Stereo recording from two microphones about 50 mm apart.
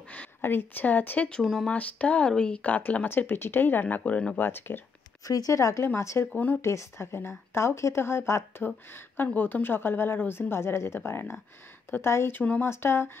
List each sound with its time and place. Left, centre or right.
0.4 s speech: left
1.4 s speech: centre
1.7 s speech: left
2.6 s speech: left
3.1 s a woman's voice: left
3.8 s speech: left
4.4 s a woman's voice: left
5.5 s speech: left
6.3 s speech: left
6.6 s speech: left
8.5 s a woman's voice: left